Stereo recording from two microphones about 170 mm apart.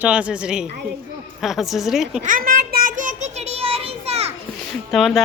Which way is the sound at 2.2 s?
55° right (ahead or behind).